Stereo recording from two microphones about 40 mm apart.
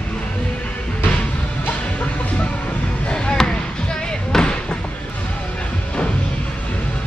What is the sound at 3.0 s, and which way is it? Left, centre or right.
Basketball bounce, left.